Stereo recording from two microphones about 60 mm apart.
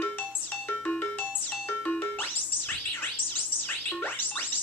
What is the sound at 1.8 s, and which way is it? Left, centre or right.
Music, left.